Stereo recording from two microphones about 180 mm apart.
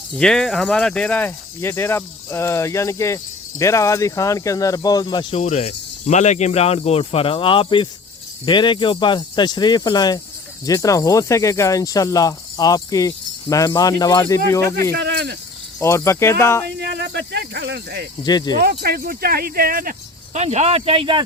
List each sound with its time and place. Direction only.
0.2 s speech: 5° left (ahead or behind); by 5.4 s 25° left (ahead or behind)
5.4 s speech: 40° left (ahead or behind); by 14.9 s 15° left (ahead or behind)
14.9 s speech: 65° right (ahead or behind)
15.8 s speech: 15° left (ahead or behind)
16.6 s speech: 65° right (ahead or behind)
18.2 s speech: 25° left (ahead or behind)
18.6 s speech: 60° right (ahead or behind); by 21.2 s 30° right (ahead or behind)